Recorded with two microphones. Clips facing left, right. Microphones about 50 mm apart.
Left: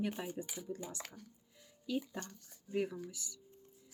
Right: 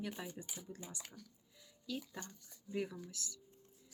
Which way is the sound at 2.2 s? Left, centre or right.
Centre.